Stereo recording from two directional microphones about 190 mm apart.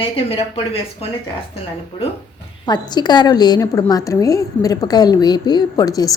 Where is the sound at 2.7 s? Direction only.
20° left (ahead or behind).